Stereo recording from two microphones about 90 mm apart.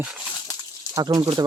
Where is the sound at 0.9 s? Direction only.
45° right (ahead or behind).